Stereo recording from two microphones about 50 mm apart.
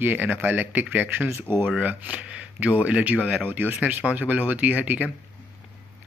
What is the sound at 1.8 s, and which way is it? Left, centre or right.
Speech, right.